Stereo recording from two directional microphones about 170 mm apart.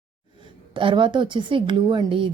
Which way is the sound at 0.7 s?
30° right (ahead or behind).